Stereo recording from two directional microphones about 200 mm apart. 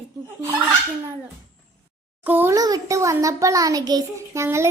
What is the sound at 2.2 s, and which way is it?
A child's voice, 10° right (ahead or behind).